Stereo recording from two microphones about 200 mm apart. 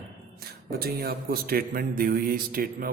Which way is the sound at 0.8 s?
50° right (ahead or behind).